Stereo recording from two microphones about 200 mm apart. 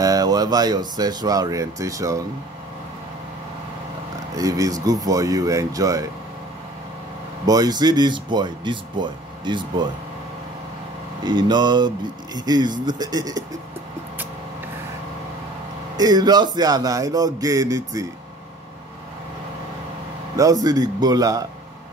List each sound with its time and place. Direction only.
0.0 s speech: 20° right (ahead or behind)
4.4 s speech: 15° right (ahead or behind)
7.4 s speech: 20° right (ahead or behind)
11.2 s speech: 20° right (ahead or behind)
16.0 s speech: 20° right (ahead or behind)
20.3 s speech: 15° right (ahead or behind)